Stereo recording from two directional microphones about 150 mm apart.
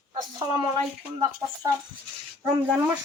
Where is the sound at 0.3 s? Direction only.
30° right (ahead or behind).